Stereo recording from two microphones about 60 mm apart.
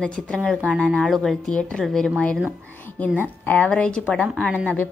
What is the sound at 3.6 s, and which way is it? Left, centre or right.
Speech, centre.